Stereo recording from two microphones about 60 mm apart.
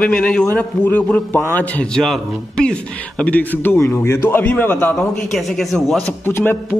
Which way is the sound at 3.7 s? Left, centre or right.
Left.